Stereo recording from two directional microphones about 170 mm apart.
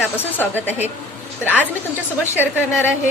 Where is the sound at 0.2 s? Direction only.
10° left (ahead or behind).